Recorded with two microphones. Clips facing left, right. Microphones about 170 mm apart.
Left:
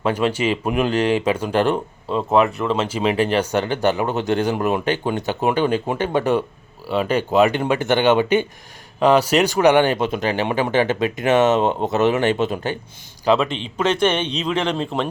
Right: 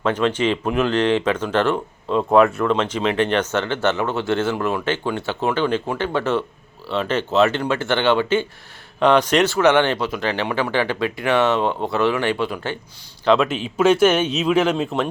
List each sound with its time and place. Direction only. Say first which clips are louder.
0.0 s speech: even; 10° left (ahead or behind)
2.0 s speech: right 2 dB; centre (ahead or behind); by 12.7 s 20° left (ahead or behind)
13.2 s speech: right 1 dB; 5° left (ahead or behind)
13.5 s speech: right 4 dB; 5° right (ahead or behind)